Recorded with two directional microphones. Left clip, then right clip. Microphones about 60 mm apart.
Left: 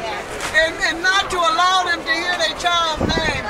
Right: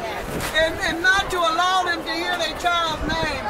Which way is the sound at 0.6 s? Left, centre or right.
Centre.